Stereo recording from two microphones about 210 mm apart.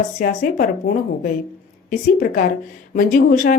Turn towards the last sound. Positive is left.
turn(degrees=40)  # may be behind; listen again after turning